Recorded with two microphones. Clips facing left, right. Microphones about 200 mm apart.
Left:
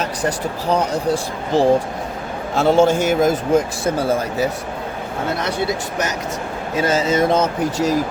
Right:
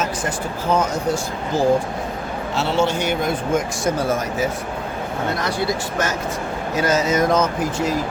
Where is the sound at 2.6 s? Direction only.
50° left (ahead or behind).